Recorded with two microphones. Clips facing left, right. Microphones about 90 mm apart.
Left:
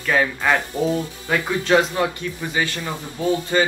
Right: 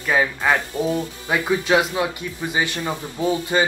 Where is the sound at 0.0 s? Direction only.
10° right (ahead or behind).